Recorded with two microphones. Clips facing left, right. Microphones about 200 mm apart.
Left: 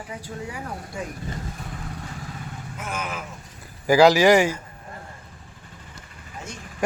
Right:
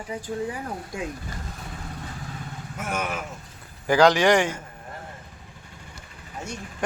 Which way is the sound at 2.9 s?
70° right (ahead or behind).